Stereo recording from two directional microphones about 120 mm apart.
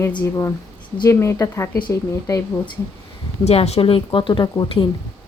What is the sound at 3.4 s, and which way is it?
Speech, 60° left (ahead or behind).